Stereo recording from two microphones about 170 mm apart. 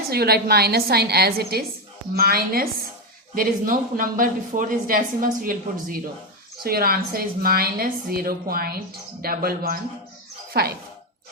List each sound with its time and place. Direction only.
0.1 s a woman's voice: 70° right (ahead or behind)
6.6 s speech: 60° right (ahead or behind)